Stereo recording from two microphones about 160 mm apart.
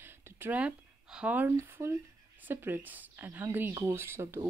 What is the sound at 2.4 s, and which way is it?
Speech, 15° right (ahead or behind).